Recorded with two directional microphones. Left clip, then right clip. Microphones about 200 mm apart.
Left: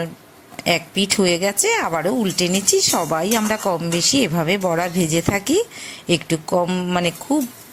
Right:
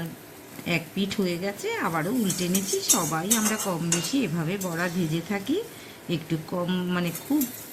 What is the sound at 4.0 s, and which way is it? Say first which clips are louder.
Speech: left 10 dB; 35° left (ahead or behind).